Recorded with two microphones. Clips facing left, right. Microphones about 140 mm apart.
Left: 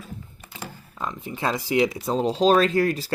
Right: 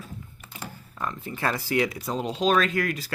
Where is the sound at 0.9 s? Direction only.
15° left (ahead or behind).